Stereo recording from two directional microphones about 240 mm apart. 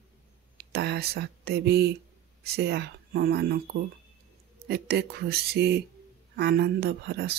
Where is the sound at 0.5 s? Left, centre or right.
Right.